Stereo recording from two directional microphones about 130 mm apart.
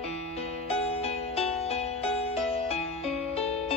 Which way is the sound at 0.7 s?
50° left (ahead or behind).